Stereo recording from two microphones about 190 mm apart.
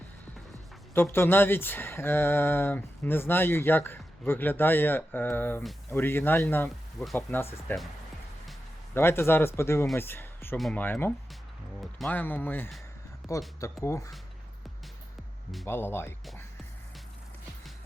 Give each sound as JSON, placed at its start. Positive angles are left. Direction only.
{"t": 0.9, "sound": "speech", "side_deg": 10}
{"t": 9.0, "sound": "speech", "side_deg": 10}
{"t": 13.2, "sound": "speech", "side_deg": 0}
{"t": 13.6, "sound": "speech", "side_deg": 15}
{"t": 15.6, "sound": "speech", "side_deg": 10}